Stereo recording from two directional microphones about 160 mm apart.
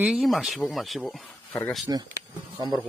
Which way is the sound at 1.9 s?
20° right (ahead or behind).